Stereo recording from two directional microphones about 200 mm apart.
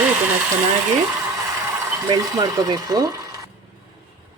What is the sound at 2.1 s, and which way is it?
A woman's voice, 20° right (ahead or behind).